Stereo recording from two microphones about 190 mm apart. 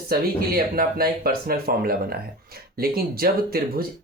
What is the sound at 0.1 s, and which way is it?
Speech, 50° right (ahead or behind).